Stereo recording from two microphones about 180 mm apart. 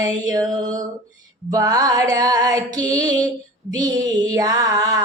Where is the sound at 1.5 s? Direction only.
20° right (ahead or behind).